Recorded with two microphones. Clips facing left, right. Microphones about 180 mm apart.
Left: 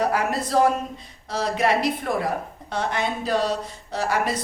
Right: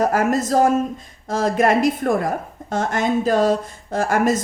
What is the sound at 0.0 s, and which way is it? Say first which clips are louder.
A woman's voice: right 5 dB; 45° right (ahead or behind).